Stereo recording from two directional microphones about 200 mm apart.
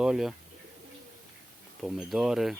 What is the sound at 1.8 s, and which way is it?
Speech, centre (ahead or behind).